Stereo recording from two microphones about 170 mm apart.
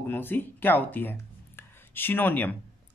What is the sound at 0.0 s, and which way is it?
Speech, 10° left (ahead or behind).